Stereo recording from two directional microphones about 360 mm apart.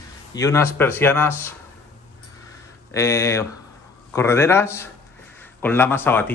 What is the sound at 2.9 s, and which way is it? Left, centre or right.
A man's voice, centre.